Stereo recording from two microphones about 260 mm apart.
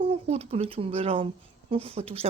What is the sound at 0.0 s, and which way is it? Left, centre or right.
A woman's voice, right.